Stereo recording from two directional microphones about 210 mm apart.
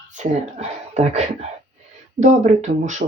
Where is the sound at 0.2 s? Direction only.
35° right (ahead or behind).